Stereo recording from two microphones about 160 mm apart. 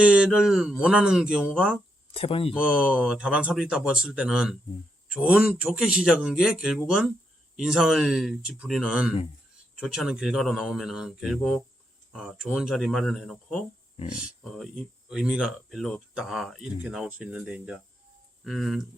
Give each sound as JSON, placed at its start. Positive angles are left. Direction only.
{"t": 0.0, "sound": "speech", "side_deg": -5}
{"t": 2.1, "sound": "speech", "side_deg": 35}
{"t": 2.5, "sound": "a man's voice", "side_deg": -5}